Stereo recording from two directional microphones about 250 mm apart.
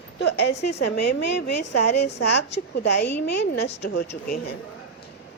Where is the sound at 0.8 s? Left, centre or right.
Left.